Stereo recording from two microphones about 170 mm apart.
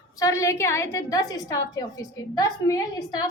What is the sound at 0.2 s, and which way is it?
A woman's voice, 20° left (ahead or behind).